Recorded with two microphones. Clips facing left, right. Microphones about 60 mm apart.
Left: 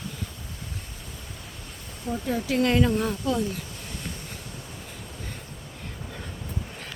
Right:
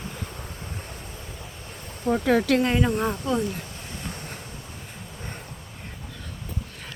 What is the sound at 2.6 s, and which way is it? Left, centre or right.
Speech, centre.